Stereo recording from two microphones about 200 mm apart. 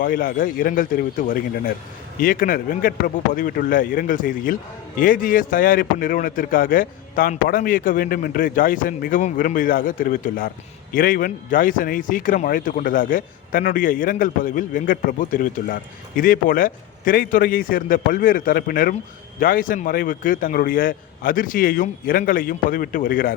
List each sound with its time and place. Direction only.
0.0 s a man's voice: 45° left (ahead or behind)